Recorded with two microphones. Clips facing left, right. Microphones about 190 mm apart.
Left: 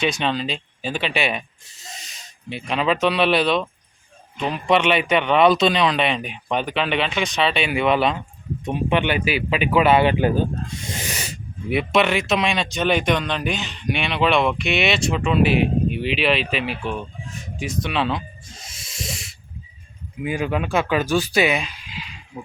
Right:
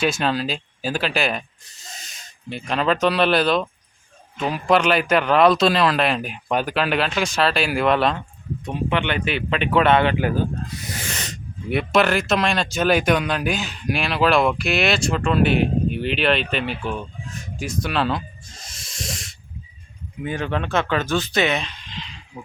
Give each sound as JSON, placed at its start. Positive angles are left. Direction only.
{"t": 0.0, "sound": "speech", "side_deg": -5}
{"t": 8.6, "sound": "speech", "side_deg": 20}
{"t": 11.1, "sound": "speech", "side_deg": 10}
{"t": 18.6, "sound": "sanding", "side_deg": 5}
{"t": 20.2, "sound": "speech", "side_deg": 10}